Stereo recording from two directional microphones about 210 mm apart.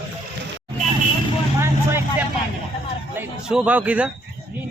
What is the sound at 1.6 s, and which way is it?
Vehicle, 10° right (ahead or behind).